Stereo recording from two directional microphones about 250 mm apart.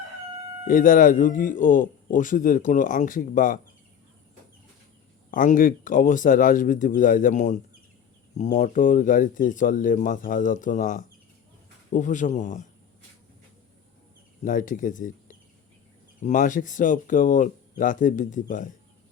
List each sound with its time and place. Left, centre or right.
0.7 s a man's voice: left
5.3 s a man's voice: left
14.4 s a man's voice: left